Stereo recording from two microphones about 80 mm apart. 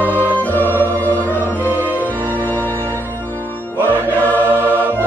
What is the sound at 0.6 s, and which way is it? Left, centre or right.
Organ, right.